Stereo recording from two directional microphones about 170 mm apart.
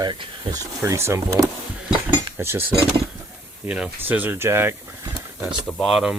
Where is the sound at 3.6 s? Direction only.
5° right (ahead or behind).